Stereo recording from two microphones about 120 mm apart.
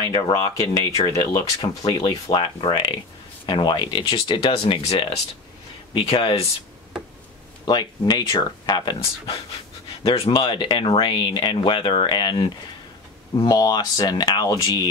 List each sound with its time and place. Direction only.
0.1 s speech: 35° left (ahead or behind); by 5.2 s 55° left (ahead or behind)
7.6 s speech: 35° left (ahead or behind)
10.0 s speech: 50° left (ahead or behind)
13.5 s speech: 35° left (ahead or behind)